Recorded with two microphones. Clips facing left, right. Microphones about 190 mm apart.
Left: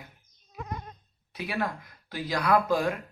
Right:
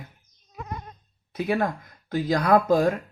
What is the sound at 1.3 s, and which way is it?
Speech, 45° right (ahead or behind).